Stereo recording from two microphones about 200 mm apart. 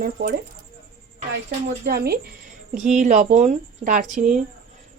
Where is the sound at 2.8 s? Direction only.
40° right (ahead or behind).